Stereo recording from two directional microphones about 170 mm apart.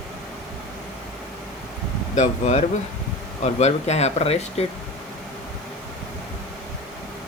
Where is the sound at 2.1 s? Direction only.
45° left (ahead or behind).